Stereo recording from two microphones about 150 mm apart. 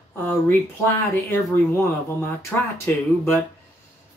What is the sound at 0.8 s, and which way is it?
Speech, 15° left (ahead or behind).